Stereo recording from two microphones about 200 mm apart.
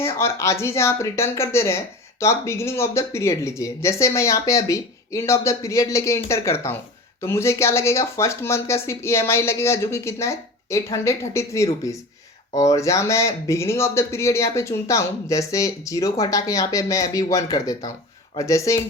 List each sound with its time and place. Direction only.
0.0 s speech: 15° left (ahead or behind)